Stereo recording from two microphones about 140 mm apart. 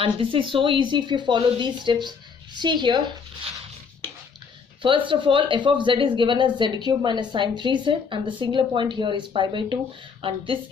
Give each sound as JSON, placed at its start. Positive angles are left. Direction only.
{"t": 0.0, "sound": "speech", "side_deg": -40}
{"t": 4.8, "sound": "speech", "side_deg": -35}